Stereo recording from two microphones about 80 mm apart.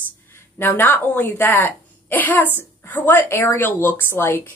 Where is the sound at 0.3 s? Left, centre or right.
Left.